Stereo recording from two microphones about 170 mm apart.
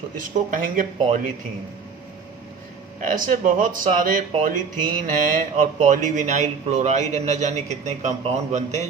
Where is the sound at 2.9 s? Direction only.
50° right (ahead or behind).